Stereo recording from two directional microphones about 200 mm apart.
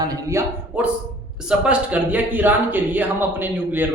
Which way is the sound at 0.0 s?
15° right (ahead or behind).